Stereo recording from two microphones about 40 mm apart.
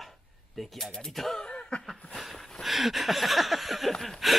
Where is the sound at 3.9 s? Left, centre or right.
Centre.